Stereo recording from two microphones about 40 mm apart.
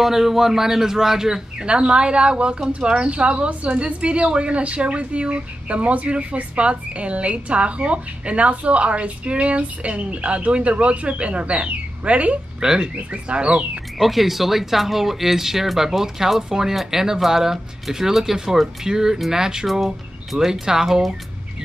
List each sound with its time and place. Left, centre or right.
0.0 s speech: centre
1.7 s speech: right
12.5 s speech: centre
12.9 s speech: right
13.9 s speech: centre